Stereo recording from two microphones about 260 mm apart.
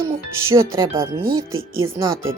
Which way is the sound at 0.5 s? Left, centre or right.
Centre.